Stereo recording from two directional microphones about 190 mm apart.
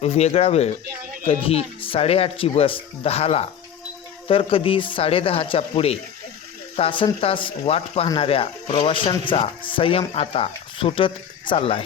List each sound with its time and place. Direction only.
0.0 s speech: 35° left (ahead or behind)